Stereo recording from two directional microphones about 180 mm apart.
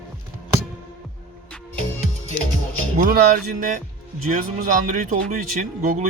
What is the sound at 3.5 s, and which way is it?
Speech, 45° right (ahead or behind).